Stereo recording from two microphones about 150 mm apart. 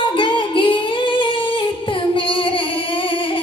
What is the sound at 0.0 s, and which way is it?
Singing, 35° left (ahead or behind).